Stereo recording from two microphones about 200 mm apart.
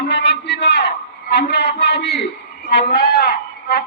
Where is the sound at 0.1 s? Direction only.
60° left (ahead or behind).